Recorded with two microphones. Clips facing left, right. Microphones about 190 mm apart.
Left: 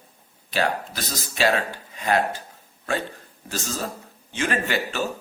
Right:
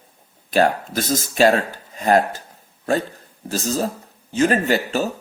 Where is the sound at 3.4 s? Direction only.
40° right (ahead or behind).